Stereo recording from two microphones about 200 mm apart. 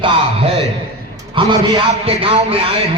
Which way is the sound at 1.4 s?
25° right (ahead or behind).